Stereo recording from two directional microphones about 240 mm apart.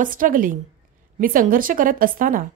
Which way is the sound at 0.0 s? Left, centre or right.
Right.